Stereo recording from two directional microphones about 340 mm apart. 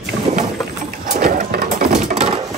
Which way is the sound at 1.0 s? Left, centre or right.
Right.